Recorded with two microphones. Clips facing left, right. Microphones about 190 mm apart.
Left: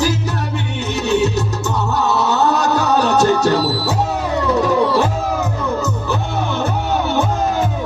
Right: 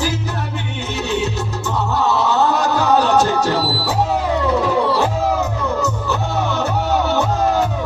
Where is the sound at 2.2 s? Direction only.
40° left (ahead or behind).